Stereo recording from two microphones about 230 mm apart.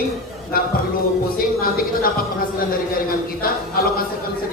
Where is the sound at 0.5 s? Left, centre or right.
Left.